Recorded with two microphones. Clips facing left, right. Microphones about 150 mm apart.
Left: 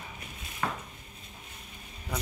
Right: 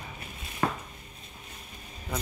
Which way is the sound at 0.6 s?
45° right (ahead or behind).